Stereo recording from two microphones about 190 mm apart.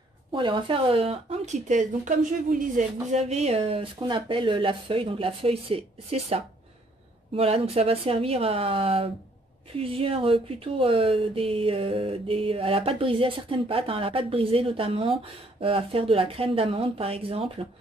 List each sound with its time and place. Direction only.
0.3 s speech: 25° right (ahead or behind)